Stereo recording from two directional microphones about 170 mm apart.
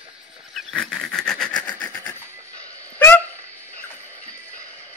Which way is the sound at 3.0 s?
10° left (ahead or behind).